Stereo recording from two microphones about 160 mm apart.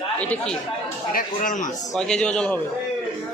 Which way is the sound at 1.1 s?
60° left (ahead or behind).